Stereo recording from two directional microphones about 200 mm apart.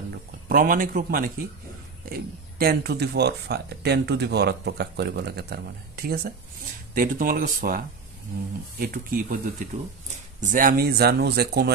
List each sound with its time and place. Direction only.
0.5 s speech: 45° right (ahead or behind)